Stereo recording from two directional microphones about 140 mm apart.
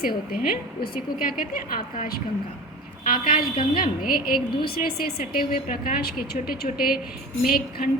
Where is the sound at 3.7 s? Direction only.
90° left.